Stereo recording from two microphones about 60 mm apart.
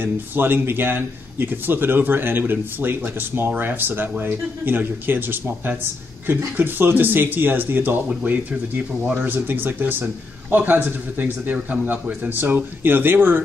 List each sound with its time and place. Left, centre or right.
0.0 s a man's voice: right